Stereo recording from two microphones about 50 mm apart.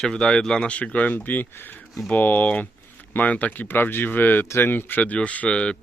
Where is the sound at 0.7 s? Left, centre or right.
Left.